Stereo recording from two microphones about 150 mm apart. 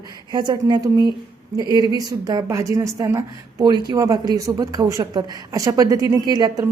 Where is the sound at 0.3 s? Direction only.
30° right (ahead or behind).